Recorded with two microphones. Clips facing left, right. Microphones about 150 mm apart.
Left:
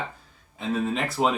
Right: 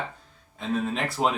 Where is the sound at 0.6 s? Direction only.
Centre (ahead or behind).